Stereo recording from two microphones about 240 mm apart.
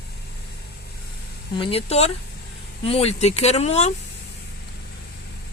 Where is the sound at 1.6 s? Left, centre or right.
Left.